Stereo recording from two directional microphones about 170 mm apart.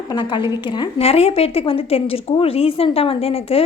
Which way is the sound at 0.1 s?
25° left (ahead or behind).